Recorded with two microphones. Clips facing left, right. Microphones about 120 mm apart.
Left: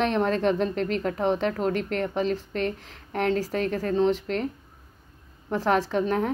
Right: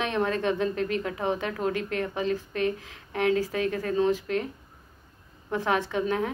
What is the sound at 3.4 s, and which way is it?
Speech, 35° left (ahead or behind).